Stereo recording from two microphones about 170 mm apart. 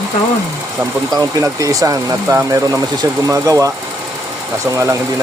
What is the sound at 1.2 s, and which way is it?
Speech, 20° right (ahead or behind).